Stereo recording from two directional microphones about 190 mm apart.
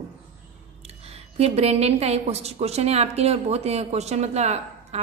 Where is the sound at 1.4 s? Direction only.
35° right (ahead or behind).